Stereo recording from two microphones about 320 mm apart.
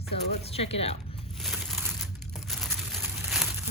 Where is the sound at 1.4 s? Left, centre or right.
Centre.